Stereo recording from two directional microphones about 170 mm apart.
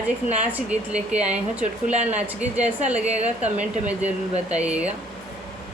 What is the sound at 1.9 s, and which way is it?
Speech, 40° right (ahead or behind).